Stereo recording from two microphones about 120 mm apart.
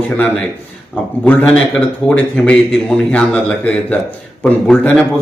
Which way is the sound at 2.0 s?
10° left (ahead or behind).